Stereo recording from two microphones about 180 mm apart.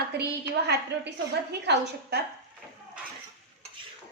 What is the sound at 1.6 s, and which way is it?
Speech, 70° right (ahead or behind).